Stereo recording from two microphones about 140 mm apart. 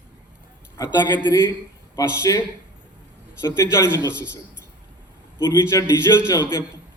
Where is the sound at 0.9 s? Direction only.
30° left (ahead or behind).